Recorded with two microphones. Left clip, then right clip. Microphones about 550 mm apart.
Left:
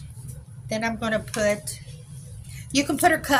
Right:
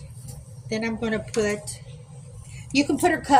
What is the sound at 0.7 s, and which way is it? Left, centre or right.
Speech, left.